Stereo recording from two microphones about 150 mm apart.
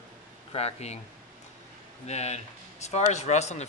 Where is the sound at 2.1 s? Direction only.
45° left (ahead or behind).